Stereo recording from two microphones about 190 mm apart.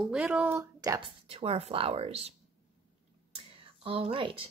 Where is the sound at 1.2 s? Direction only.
30° right (ahead or behind).